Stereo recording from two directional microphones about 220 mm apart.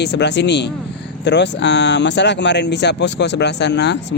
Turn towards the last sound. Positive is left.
turn(degrees=50)  # may be behind; listen again after turning